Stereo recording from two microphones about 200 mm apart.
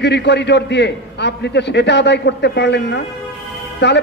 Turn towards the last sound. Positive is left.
turn(degrees=60)  # may be behind; listen again after turning